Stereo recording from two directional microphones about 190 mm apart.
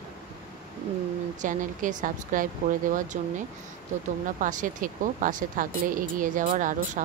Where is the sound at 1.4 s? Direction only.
40° right (ahead or behind).